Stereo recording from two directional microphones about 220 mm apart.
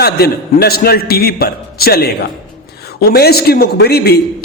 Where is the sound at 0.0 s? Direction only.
45° left (ahead or behind).